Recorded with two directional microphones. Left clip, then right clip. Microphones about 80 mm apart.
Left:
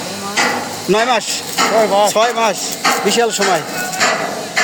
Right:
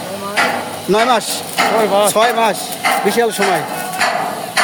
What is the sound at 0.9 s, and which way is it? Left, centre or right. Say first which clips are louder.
Speech: right 1 dB; centre.